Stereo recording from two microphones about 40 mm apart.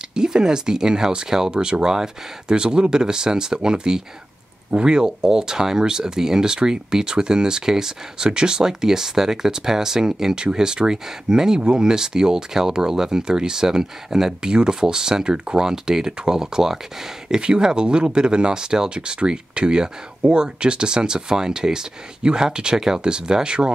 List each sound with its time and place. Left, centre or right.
0.1 s speech: centre
15.6 s speech: centre